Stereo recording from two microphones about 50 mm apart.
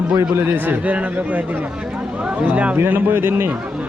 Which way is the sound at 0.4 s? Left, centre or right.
Right.